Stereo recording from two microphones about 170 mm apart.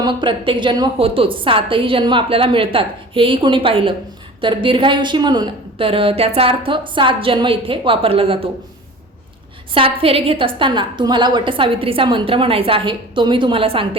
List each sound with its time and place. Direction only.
0.0 s a woman's voice: 25° right (ahead or behind)
9.7 s a woman's voice: 35° right (ahead or behind)